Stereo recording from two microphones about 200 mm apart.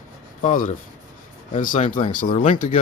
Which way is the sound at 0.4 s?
40° left (ahead or behind).